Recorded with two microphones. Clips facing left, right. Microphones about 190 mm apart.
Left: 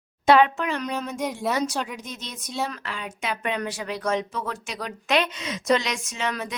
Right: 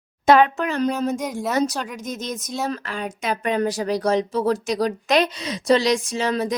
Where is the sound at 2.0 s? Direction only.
45° right (ahead or behind).